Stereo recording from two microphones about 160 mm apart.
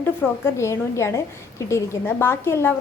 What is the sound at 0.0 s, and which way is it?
A woman's voice, 15° left (ahead or behind).